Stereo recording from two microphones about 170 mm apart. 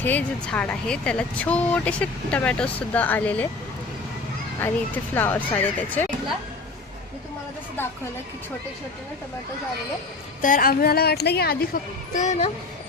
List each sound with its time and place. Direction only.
0.0 s speech: 10° left (ahead or behind)
5.1 s speech: 10° left (ahead or behind)
10.4 s a woman's voice: 55° left (ahead or behind)
12.1 s speech: 45° left (ahead or behind)